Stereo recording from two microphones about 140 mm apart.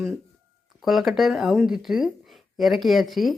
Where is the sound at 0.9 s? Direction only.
Centre (ahead or behind).